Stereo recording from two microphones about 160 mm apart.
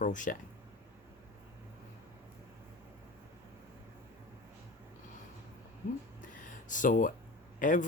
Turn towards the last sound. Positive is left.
turn(degrees=55)  # may be behind; listen again after turning